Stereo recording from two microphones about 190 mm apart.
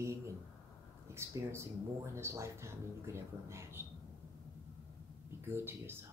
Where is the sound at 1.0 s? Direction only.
15° right (ahead or behind).